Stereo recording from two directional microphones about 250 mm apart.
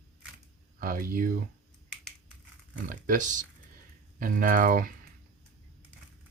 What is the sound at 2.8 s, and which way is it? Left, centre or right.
Speech, right.